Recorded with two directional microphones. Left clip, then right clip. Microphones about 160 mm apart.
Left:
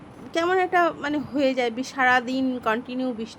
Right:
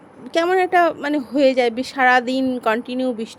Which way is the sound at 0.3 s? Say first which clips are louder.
Right 5 dB; 35° right (ahead or behind).